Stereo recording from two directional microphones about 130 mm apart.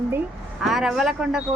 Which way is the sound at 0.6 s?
5° right (ahead or behind).